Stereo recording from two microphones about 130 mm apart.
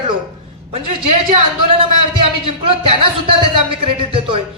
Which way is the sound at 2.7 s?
45° right (ahead or behind).